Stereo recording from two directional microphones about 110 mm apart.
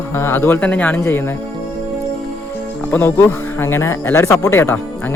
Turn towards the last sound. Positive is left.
turn(degrees=25)  # may be behind; listen again after turning